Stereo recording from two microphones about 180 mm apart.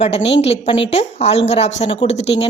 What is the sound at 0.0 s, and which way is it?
A woman's voice, 35° left (ahead or behind).